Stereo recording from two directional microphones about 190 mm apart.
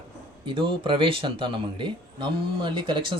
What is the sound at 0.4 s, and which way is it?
Speech, 25° right (ahead or behind).